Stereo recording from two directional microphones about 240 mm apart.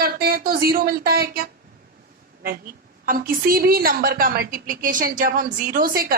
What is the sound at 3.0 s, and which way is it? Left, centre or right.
A woman's voice, right.